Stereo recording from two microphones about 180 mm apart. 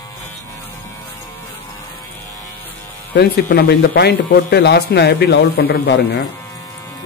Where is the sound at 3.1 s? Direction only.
65° left (ahead or behind).